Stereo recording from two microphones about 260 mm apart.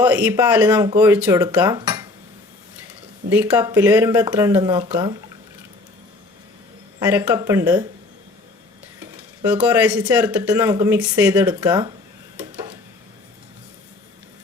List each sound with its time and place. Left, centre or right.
0.0 s speech: centre
3.2 s speech: centre
7.0 s speech: centre
9.0 s speech: centre